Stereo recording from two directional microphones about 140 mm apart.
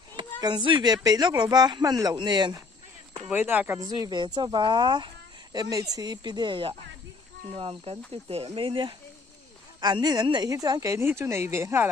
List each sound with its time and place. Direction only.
0.1 s speech: 30° right (ahead or behind)
3.3 s speech: 15° right (ahead or behind)
3.8 s speech: 30° right (ahead or behind)